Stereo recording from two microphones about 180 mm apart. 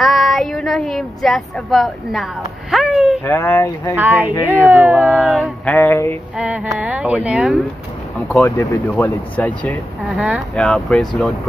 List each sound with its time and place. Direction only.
0.0 s speech: centre (ahead or behind)
2.7 s a sound: centre (ahead or behind)
3.3 s speech: 15° left (ahead or behind)
3.9 s speech: 10° right (ahead or behind); by 6.1 s 10° left (ahead or behind)
6.3 s speech: 5° right (ahead or behind)
8.4 s speech: 15° left (ahead or behind)
10.1 s speech: 5° right (ahead or behind)
10.5 s speech: 5° left (ahead or behind)